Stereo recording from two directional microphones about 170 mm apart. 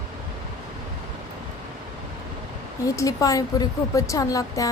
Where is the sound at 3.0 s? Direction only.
20° left (ahead or behind).